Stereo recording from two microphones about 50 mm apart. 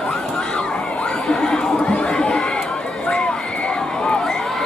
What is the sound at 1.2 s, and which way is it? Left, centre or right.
Chatter, centre.